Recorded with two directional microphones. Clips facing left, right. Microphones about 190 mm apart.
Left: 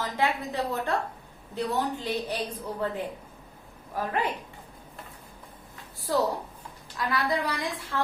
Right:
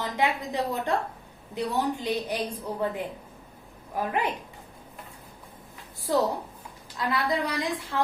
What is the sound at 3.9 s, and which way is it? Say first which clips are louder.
Speech: right 2 dB; 15° right (ahead or behind).